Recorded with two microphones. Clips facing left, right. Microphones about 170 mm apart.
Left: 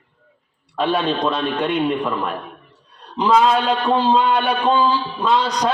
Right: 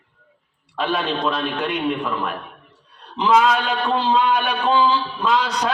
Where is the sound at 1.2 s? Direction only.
35° left (ahead or behind).